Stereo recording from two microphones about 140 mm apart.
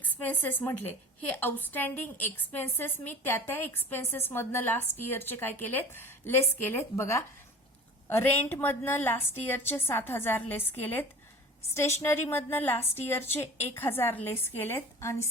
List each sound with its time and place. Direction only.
0.0 s a woman's voice: 15° left (ahead or behind)